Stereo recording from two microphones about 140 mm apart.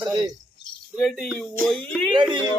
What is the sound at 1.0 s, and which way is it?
Speech, 5° left (ahead or behind).